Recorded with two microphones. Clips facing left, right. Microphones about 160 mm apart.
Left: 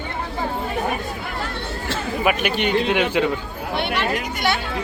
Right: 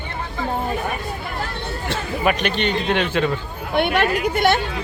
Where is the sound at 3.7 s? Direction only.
50° right (ahead or behind).